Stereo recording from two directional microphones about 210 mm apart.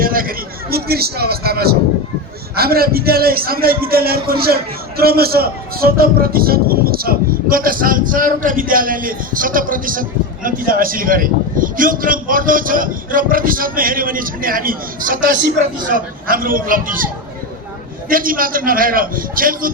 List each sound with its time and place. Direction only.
0.0 s a man's voice: 45° right (ahead or behind)
18.1 s a man's voice: 40° right (ahead or behind)